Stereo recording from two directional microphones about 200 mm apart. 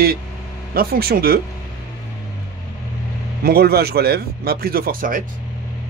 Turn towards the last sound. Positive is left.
turn(degrees=-45)  # may be behind; listen again after turning